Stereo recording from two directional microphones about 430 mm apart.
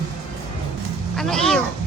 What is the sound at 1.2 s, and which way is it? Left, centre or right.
Cat, centre.